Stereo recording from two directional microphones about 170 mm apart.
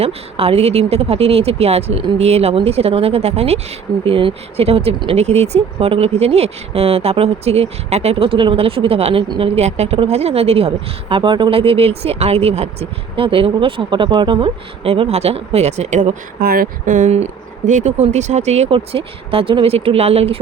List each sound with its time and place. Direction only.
0.0 s speech: 35° right (ahead or behind)
16.4 s speech: 60° right (ahead or behind); by 20.4 s 35° right (ahead or behind)